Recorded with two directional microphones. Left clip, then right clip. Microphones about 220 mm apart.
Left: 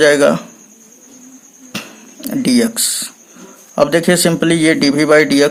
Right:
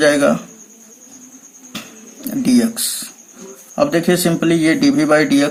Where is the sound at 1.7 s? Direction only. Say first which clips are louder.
Left 4 dB; 40° left (ahead or behind).